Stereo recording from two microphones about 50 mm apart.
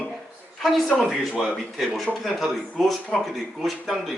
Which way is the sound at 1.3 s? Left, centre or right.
Centre.